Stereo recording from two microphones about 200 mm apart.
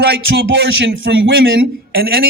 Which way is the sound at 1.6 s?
50° right (ahead or behind).